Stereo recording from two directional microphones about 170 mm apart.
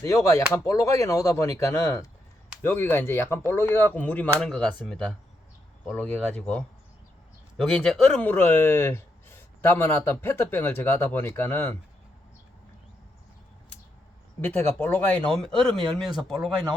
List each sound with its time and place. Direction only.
0.0 s speech: 20° left (ahead or behind)
14.5 s speech: 10° left (ahead or behind)